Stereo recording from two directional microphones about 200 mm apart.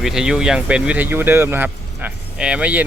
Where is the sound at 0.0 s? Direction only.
5° right (ahead or behind).